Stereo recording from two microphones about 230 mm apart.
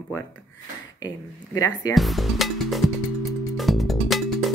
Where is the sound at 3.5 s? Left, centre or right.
Centre.